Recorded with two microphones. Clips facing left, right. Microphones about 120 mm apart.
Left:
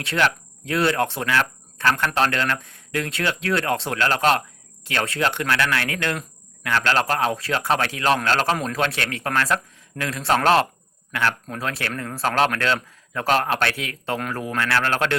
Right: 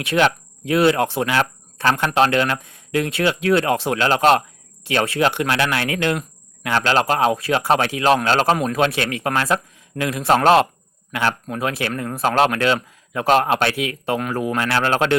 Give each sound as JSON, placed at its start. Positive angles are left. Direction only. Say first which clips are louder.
{"t": 0.0, "sound": "speech", "louder": "right 4 dB", "side_deg": -20}